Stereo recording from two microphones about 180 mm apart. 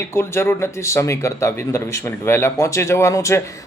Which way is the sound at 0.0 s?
15° left (ahead or behind).